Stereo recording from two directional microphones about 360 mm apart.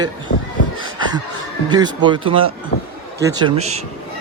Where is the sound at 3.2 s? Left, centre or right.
Centre.